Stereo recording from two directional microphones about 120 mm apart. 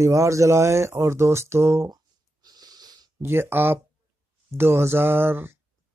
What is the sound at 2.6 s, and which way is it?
Wheeze, 35° right (ahead or behind).